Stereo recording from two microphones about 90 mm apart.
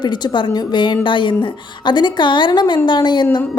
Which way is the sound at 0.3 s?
60° left (ahead or behind).